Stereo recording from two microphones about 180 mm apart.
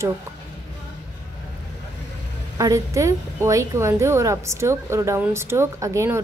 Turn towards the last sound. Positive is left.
turn(degrees=-15)  # may be behind; listen again after turning